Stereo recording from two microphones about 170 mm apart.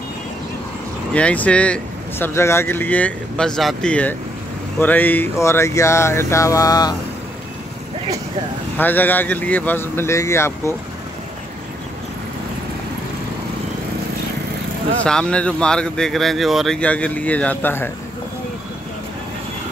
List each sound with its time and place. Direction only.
1.1 s speech: 10° left (ahead or behind)
8.7 s speech: 10° left (ahead or behind)
15.0 s speech: 5° left (ahead or behind)